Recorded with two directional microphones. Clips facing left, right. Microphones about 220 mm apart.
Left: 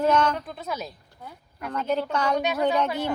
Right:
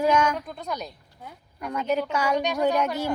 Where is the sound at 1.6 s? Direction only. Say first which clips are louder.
Right 1 dB; 10° right (ahead or behind).